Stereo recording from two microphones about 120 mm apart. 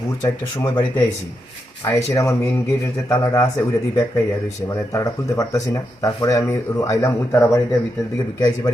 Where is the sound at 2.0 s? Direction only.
25° left (ahead or behind).